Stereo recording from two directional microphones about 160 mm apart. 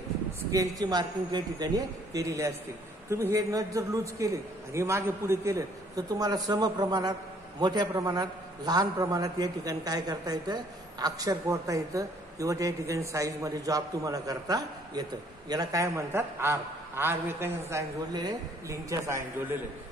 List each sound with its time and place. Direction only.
0.5 s a man's voice: 20° right (ahead or behind)